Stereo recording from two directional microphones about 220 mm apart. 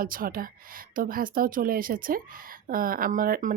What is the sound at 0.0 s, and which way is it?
Speech, 40° right (ahead or behind).